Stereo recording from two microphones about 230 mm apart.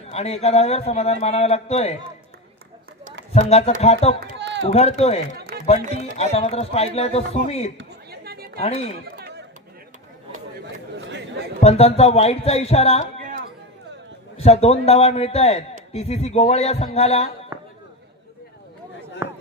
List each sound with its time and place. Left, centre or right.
0.1 s a man's voice: left
3.3 s a man's voice: left
4.2 s run: right
4.7 s a man's voice: left
7.8 s chatter: right
8.5 s speech: left
9.1 s chatter: right
10.9 s chatter: right
11.6 s a man's voice: left
13.2 s a sound: right
14.3 s a man's voice: left
17.5 s chop: centre
19.2 s a sound: centre